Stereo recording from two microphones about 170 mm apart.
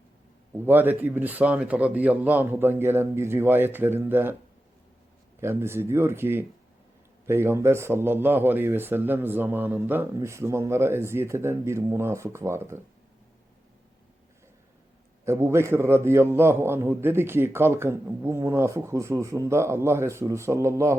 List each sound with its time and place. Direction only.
0.5 s a man's voice: 10° right (ahead or behind)
5.4 s a man's voice: 15° right (ahead or behind)
15.2 s a man's voice: 15° right (ahead or behind)